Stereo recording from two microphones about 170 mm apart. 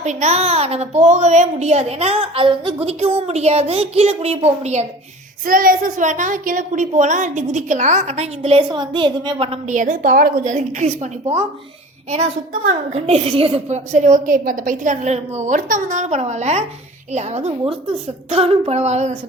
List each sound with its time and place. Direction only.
0.0 s a woman's voice: 40° right (ahead or behind)
5.5 s a woman's voice: 55° right (ahead or behind); by 9.6 s 30° right (ahead or behind)
9.6 s a woman's voice: 50° right (ahead or behind)